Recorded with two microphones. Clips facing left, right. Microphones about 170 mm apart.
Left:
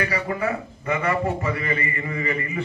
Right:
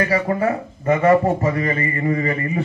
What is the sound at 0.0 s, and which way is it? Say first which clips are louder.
A man's voice: right 6 dB; 45° right (ahead or behind).